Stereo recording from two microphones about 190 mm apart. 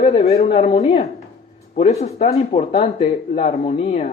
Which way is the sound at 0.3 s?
35° left (ahead or behind).